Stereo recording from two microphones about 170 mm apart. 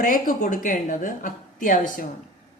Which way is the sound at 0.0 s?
55° left (ahead or behind).